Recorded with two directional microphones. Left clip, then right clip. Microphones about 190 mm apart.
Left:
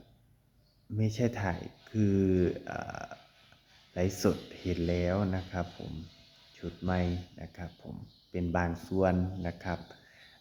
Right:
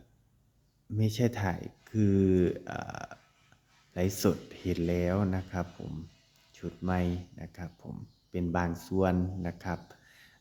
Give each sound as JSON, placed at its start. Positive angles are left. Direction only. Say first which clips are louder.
{"t": 0.9, "sound": "speech", "louder": "right 1 dB", "side_deg": -25}
{"t": 4.2, "sound": "speech", "louder": "right 1 dB", "side_deg": -25}